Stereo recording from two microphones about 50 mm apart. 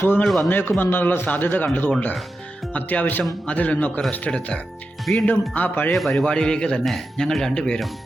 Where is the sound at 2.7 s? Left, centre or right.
Left; by 5.2 s centre.